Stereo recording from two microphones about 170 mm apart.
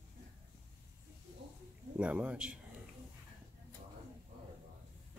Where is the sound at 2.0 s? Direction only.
10° right (ahead or behind).